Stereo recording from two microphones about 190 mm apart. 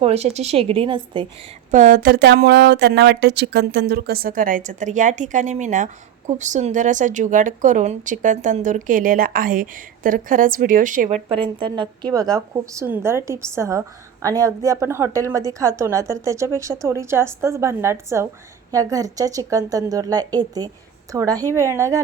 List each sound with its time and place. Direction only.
0.0 s a woman's voice: 35° right (ahead or behind)
1.7 s speech: 45° right (ahead or behind)
11.6 s a woman's voice: 25° right (ahead or behind)